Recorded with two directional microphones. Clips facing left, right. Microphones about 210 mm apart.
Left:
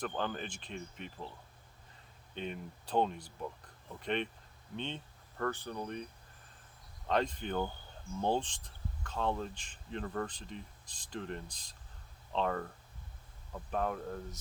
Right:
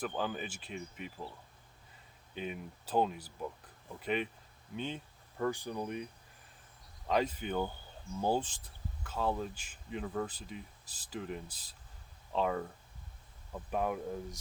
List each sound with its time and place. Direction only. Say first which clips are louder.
0.0 s speech: right 1 dB; 5° right (ahead or behind)
2.3 s speech: even; 5° right (ahead or behind)
7.1 s speech: right 1 dB; 5° right (ahead or behind)